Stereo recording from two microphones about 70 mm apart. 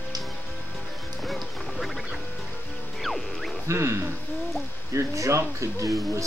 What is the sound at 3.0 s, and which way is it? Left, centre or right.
Music, centre.